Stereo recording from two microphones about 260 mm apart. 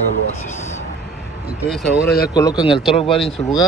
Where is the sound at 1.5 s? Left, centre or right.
Centre.